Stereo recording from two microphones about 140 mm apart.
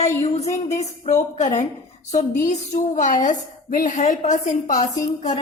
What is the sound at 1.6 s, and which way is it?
A woman's voice, 55° left (ahead or behind).